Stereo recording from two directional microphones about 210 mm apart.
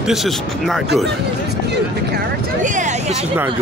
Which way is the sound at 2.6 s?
35° right (ahead or behind).